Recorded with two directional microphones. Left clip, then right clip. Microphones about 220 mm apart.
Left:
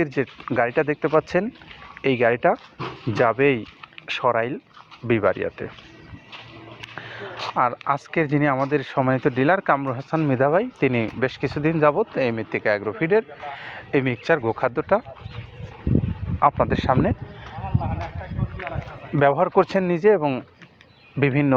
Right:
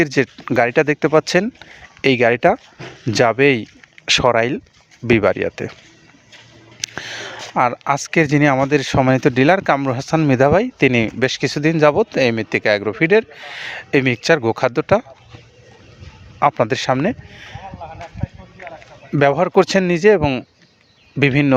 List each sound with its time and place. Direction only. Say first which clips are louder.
0.0 s speech: right 7 dB; 50° right (ahead or behind)
6.9 s a sound: right 2 dB; 50° right (ahead or behind)
7.5 s speech: right 5 dB; 50° right (ahead or behind)
16.4 s speech: right 3 dB; 55° right (ahead or behind)
19.2 s speech: right 4 dB; 50° right (ahead or behind)